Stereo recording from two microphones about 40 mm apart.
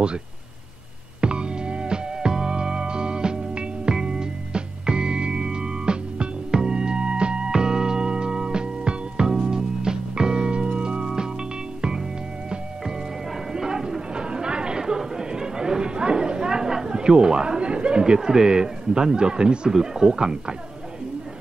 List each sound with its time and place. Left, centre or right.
1.2 s music: right
13.5 s chatter: centre